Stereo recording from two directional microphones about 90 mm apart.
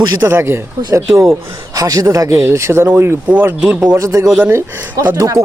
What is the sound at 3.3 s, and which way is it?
Speech, 15° right (ahead or behind).